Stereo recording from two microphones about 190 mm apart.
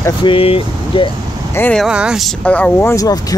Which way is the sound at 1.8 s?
5° right (ahead or behind).